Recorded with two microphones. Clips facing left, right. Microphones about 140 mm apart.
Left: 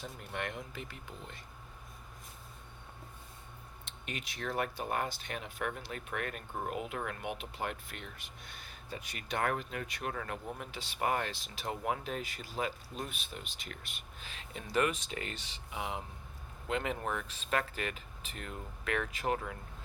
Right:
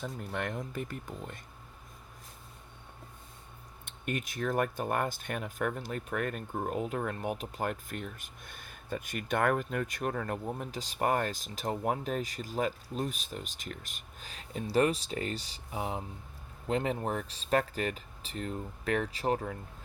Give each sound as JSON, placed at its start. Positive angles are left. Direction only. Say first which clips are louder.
{"t": 0.0, "sound": "speech", "louder": "right 4 dB", "side_deg": -50}
{"t": 3.8, "sound": "speech", "louder": "right 8 dB", "side_deg": -50}